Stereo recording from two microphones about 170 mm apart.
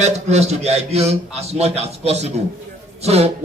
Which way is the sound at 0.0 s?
40° right (ahead or behind).